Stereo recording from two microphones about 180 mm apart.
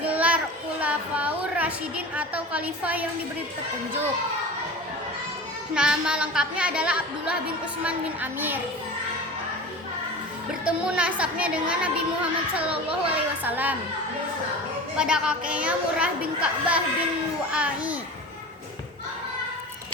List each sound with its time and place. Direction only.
0.0 s a child's voice: 10° right (ahead or behind)
5.7 s a woman's voice: 5° right (ahead or behind)
10.7 s a woman's voice: 5° right (ahead or behind)
13.1 s a woman's voice: 10° right (ahead or behind)
14.9 s a woman's voice: 5° right (ahead or behind)